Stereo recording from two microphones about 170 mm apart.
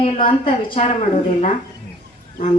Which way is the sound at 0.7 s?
30° left (ahead or behind).